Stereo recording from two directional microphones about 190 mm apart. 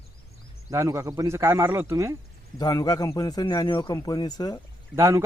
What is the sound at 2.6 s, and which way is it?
A man's voice, 20° left (ahead or behind).